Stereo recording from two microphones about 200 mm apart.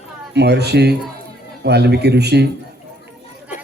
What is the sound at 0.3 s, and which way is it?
A man's voice, 55° right (ahead or behind).